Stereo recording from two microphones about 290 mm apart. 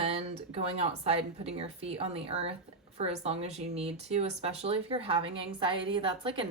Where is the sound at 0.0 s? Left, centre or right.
Right.